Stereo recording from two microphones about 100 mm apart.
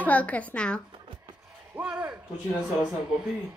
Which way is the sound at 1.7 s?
10° right (ahead or behind).